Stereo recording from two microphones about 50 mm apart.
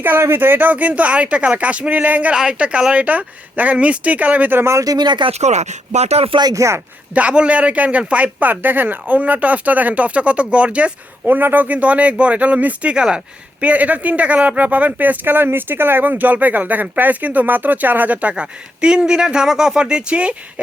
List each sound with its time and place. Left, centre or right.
0.2 s a man's voice: right
2.3 s a man's voice: centre
4.5 s speech: right
6.5 s speech: right
7.1 s speech: right
11.3 s speech: right
12.9 s a man's voice: centre